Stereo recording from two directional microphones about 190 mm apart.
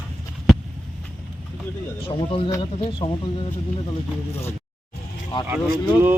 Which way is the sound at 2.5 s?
25° left (ahead or behind).